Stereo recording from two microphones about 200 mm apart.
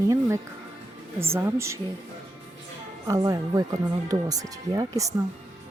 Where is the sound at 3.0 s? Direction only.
15° right (ahead or behind).